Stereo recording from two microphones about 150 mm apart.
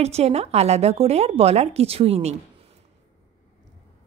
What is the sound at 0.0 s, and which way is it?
A woman's voice, 45° right (ahead or behind).